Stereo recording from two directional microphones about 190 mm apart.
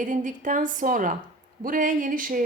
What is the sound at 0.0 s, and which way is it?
A woman's voice, 40° right (ahead or behind).